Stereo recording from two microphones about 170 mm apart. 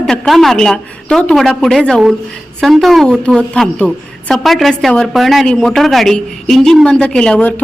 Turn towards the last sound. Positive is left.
turn(degrees=10)  # may be behind; listen again after turning